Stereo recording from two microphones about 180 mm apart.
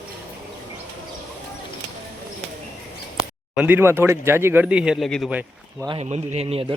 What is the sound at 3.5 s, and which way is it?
A man's voice, 10° right (ahead or behind).